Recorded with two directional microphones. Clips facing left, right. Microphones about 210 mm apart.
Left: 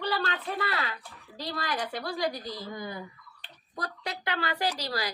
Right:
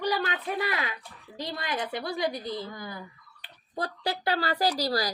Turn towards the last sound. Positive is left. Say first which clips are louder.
# right 4 dB
turn(degrees=-35)  # may be behind; listen again after turning